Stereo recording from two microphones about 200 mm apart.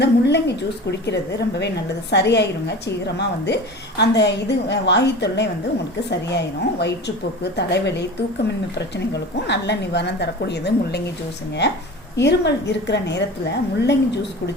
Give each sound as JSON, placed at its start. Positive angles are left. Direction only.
{"t": 0.0, "sound": "a woman's voice", "side_deg": 55}
{"t": 9.5, "sound": "a woman's voice", "side_deg": 60}
{"t": 12.1, "sound": "a woman's voice", "side_deg": 60}